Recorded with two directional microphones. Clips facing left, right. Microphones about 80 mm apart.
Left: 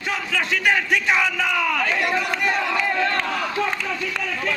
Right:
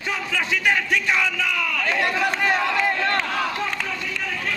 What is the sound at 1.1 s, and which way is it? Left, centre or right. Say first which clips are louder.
Speech: left 2 dB; centre.